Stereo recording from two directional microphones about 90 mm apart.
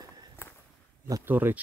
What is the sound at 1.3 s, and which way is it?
Speech, 20° right (ahead or behind).